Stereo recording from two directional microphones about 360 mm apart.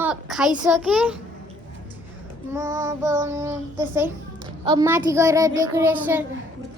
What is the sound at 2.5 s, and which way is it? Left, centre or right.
Child singing, centre.